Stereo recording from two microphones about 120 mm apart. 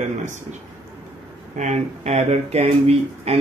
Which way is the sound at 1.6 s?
70° right (ahead or behind).